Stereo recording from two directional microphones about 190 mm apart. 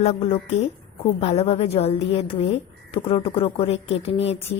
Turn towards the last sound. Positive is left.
turn(degrees=30)  # may be behind; listen again after turning